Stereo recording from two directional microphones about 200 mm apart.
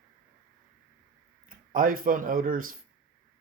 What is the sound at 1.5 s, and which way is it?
Speech, 45° right (ahead or behind).